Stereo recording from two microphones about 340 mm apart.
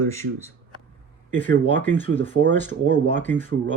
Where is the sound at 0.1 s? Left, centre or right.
Centre.